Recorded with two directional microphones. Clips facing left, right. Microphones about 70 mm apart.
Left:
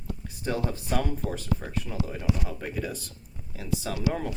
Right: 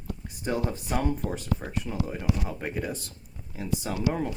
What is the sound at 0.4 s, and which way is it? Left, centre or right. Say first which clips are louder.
Speech: right 1 dB; centre.